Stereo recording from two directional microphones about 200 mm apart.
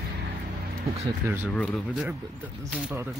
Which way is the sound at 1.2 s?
10° right (ahead or behind).